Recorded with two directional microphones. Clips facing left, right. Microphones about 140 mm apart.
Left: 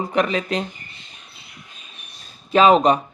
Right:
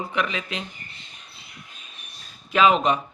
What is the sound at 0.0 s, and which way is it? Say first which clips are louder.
Speech: left 7 dB; 40° left (ahead or behind).